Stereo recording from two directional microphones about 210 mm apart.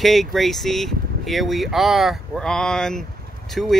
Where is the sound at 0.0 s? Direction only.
Centre (ahead or behind).